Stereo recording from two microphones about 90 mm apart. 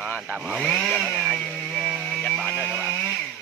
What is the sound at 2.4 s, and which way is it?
Radio, 15° left (ahead or behind).